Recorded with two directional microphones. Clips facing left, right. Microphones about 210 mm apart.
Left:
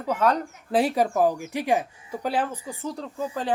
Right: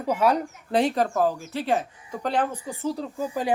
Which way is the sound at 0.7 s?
5° left (ahead or behind).